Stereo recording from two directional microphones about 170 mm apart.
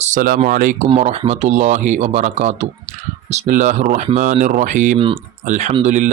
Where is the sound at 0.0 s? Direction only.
50° right (ahead or behind).